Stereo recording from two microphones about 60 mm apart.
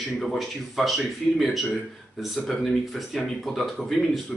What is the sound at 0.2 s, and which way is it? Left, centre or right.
Speech, centre.